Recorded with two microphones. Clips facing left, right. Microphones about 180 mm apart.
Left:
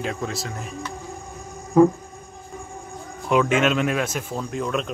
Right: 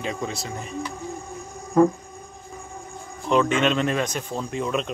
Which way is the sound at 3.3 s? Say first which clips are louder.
Left 1 dB; 5° left (ahead or behind).